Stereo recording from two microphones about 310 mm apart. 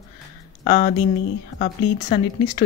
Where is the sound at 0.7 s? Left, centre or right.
Centre.